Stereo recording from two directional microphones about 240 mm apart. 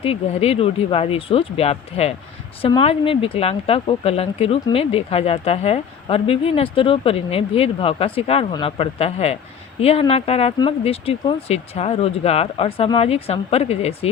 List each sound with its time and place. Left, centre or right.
0.0 s speech: left